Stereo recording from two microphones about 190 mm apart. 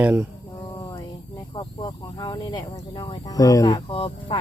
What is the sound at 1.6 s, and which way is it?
Speech, 25° left (ahead or behind).